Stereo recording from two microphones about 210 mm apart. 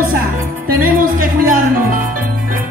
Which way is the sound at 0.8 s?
40° right (ahead or behind).